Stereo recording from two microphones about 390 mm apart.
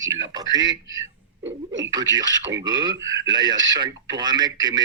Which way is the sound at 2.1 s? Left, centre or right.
Centre.